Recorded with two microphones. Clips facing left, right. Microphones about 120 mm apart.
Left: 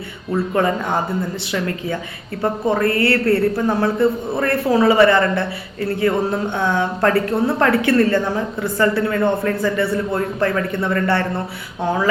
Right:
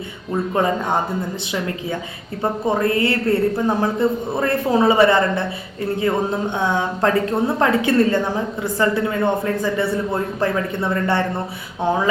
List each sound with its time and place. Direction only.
1.5 s a man's voice: 15° right (ahead or behind)